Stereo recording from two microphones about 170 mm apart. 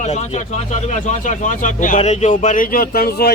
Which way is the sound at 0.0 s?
40° left (ahead or behind).